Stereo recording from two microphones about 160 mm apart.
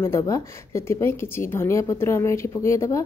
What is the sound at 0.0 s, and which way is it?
A woman's voice, 15° left (ahead or behind).